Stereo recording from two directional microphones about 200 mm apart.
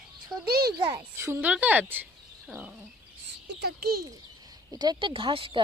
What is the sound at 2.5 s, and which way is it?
Dog, 5° right (ahead or behind).